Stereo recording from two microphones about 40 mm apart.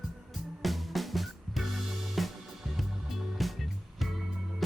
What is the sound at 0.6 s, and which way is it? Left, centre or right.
Music, centre.